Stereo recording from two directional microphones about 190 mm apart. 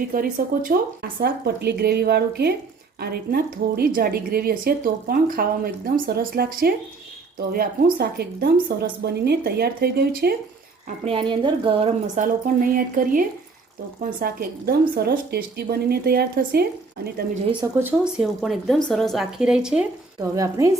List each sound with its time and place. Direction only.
0.1 s a woman's voice: 45° right (ahead or behind)
10.8 s a woman's voice: 30° right (ahead or behind); by 16.6 s 55° right (ahead or behind)
17.6 s speech: 10° right (ahead or behind)
20.3 s a woman's voice: 15° right (ahead or behind)